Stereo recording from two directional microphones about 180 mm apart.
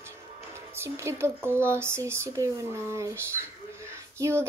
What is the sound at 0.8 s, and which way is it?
A woman's voice, 15° right (ahead or behind).